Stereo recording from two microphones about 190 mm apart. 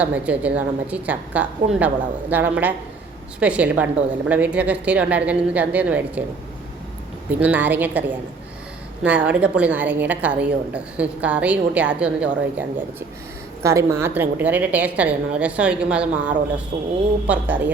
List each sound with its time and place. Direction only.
0.0 s a woman's voice: 5° right (ahead or behind)
7.3 s a woman's voice: 10° right (ahead or behind)
9.0 s a woman's voice: 5° right (ahead or behind)
16.7 s speech: 60° right (ahead or behind)
17.2 s a woman's voice: 10° right (ahead or behind)